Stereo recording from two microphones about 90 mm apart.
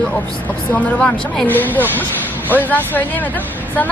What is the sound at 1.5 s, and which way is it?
A woman's voice, 20° left (ahead or behind).